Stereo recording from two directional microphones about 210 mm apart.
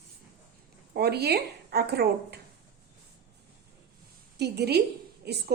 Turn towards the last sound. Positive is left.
turn(degrees=-50)  # may be behind; listen again after turning